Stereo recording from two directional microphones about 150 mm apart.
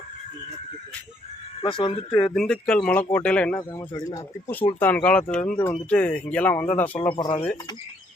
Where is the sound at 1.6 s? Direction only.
30° left (ahead or behind).